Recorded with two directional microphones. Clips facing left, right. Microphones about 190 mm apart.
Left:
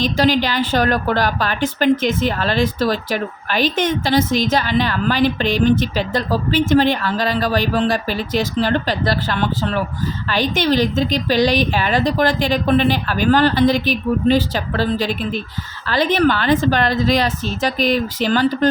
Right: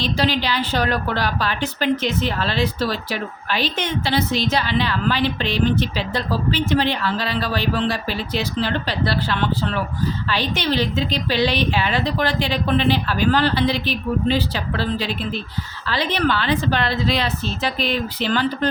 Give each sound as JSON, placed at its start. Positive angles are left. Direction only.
{"t": 0.0, "sound": "a woman's voice", "side_deg": 45}